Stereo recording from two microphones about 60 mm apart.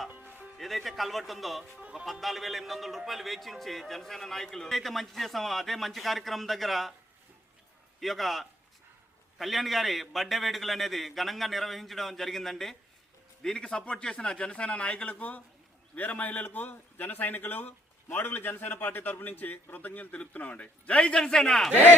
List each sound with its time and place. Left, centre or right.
0.1 s music: right
0.5 s a man's voice: centre
8.0 s a man's voice: centre